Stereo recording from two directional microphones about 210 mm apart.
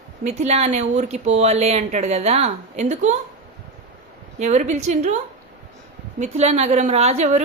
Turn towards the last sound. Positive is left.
turn(degrees=-30)  # may be behind; listen again after turning